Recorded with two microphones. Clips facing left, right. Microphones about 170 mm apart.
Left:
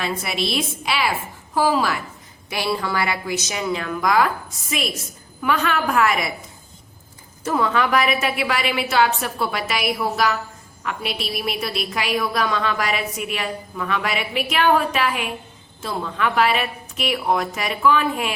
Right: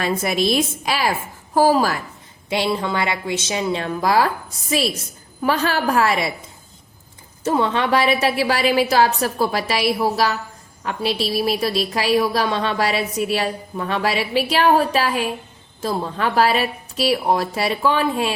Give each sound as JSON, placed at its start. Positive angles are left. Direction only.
{"t": 0.0, "sound": "a woman's voice", "side_deg": -45}
{"t": 2.5, "sound": "a woman's voice", "side_deg": -25}
{"t": 7.4, "sound": "a woman's voice", "side_deg": -25}